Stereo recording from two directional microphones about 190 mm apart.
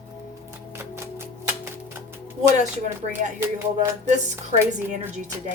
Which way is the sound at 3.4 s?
15° right (ahead or behind).